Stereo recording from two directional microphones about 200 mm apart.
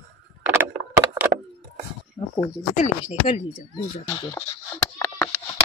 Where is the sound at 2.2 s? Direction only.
25° left (ahead or behind).